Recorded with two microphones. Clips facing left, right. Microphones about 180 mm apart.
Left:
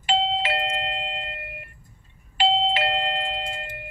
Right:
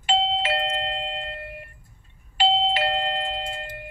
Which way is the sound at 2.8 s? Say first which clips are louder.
Right 1 dB; 25° right (ahead or behind).